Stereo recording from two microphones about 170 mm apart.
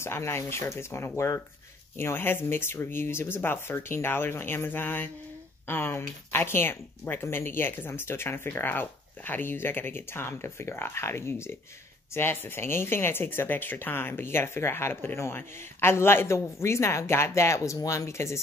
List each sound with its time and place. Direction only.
0.0 s speech: 15° left (ahead or behind)